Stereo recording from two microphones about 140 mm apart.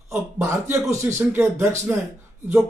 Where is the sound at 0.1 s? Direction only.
15° right (ahead or behind).